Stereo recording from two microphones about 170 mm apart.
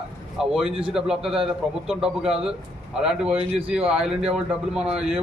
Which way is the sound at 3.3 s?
35° right (ahead or behind).